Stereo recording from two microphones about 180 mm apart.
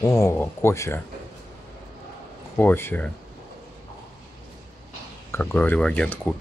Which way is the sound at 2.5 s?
10° left (ahead or behind).